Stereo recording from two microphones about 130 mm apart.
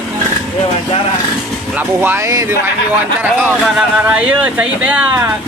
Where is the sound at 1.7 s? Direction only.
15° right (ahead or behind).